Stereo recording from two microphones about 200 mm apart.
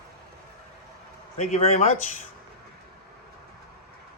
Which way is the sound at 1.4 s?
35° left (ahead or behind).